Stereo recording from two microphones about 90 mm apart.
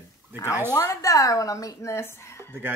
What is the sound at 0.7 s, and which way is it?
A woman's voice, 35° left (ahead or behind).